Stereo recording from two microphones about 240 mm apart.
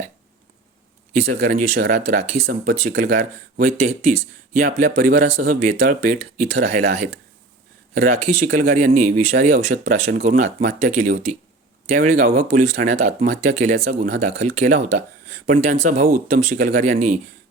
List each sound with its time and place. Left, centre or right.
1.1 s speech: right
8.4 s speech: right